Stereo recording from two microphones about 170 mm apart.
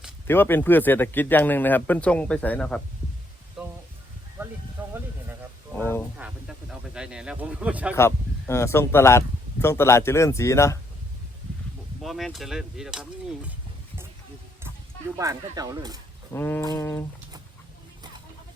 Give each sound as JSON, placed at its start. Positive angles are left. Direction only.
{"t": 0.3, "sound": "speech", "side_deg": 10}
{"t": 3.6, "sound": "a sound", "side_deg": 0}
{"t": 4.4, "sound": "a sound", "side_deg": -15}
{"t": 6.1, "sound": "speech", "side_deg": -5}
{"t": 7.9, "sound": "speech", "side_deg": 15}
{"t": 12.0, "sound": "speech", "side_deg": 0}
{"t": 15.2, "sound": "speech", "side_deg": -20}
{"t": 16.3, "sound": "speech", "side_deg": 10}